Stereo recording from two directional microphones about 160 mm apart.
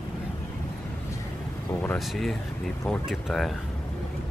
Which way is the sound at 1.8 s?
5° left (ahead or behind).